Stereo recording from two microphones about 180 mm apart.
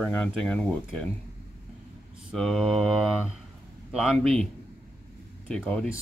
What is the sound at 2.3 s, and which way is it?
Speech, centre (ahead or behind).